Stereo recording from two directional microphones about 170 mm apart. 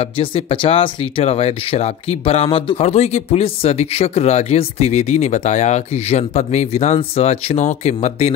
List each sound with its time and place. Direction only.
0.0 s speech: 30° left (ahead or behind)